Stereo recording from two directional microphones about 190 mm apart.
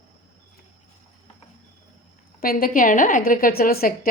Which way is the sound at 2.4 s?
50° left (ahead or behind).